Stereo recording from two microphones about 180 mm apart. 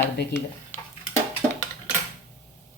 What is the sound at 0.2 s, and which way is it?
Speech, 65° left (ahead or behind).